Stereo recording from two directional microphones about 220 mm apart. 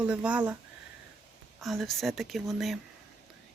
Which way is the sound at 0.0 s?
5° right (ahead or behind).